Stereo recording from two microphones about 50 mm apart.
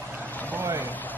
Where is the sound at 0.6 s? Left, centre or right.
Right.